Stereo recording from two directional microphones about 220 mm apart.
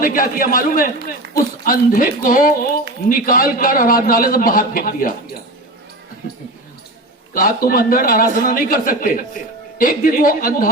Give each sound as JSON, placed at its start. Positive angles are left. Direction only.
{"t": 0.0, "sound": "a man's voice", "side_deg": 40}
{"t": 7.3, "sound": "a man's voice", "side_deg": 40}